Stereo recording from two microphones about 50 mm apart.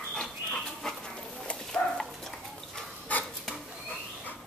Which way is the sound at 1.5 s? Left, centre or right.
Centre.